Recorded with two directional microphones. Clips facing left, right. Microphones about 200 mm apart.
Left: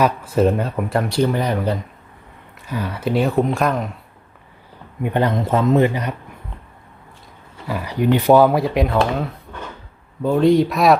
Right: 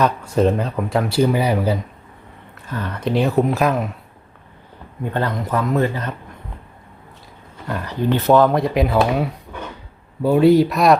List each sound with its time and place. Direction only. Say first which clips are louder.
0.0 s speech: even; 5° left (ahead or behind)
2.6 s speech: left 1 dB; 10° left (ahead or behind)
5.0 s a man's voice: left 4 dB; 20° left (ahead or behind)
7.7 s speech: left 2 dB; 10° left (ahead or behind)